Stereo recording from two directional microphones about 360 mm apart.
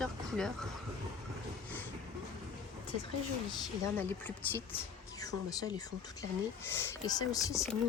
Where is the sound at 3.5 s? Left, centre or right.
Centre.